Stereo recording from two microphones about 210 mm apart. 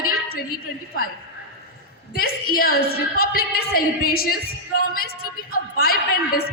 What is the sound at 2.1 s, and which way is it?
A woman's voice, 45° left (ahead or behind).